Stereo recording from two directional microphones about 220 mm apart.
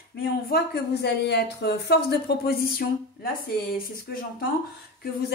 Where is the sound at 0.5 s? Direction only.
45° left (ahead or behind).